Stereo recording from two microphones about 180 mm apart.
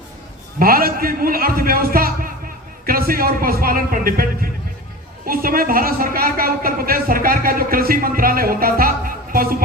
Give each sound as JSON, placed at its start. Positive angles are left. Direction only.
{"t": 0.6, "sound": "a man's voice", "side_deg": -55}